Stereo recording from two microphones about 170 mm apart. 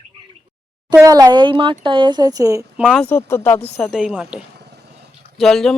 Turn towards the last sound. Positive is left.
turn(degrees=0)  # may be behind; listen again after turning